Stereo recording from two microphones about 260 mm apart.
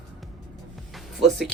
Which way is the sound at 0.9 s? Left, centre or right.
Centre.